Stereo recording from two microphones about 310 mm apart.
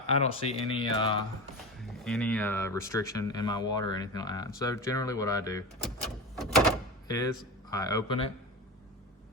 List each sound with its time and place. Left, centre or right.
0.1 s speech: centre
2.0 s speech: centre
7.7 s speech: centre